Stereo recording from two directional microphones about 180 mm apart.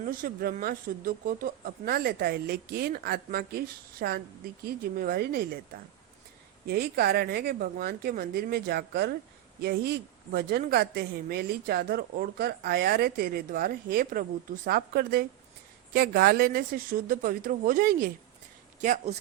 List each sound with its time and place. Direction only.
0.0 s a woman's voice: 50° right (ahead or behind)
6.7 s a woman's voice: 60° right (ahead or behind); by 19.1 s 45° right (ahead or behind)